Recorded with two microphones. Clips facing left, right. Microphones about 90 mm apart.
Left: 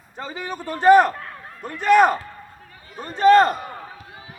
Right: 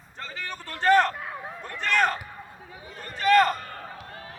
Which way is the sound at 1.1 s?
10° right (ahead or behind).